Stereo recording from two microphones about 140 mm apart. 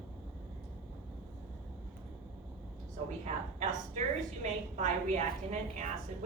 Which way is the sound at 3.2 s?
55° right (ahead or behind).